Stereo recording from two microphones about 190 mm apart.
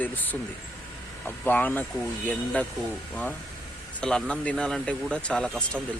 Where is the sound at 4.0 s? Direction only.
5° left (ahead or behind).